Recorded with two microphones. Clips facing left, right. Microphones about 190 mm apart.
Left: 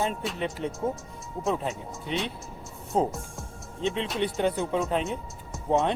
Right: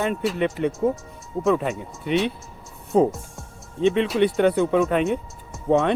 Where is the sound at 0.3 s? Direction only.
65° right (ahead or behind).